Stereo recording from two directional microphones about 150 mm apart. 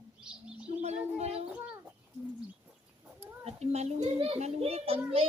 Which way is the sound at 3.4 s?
45° right (ahead or behind).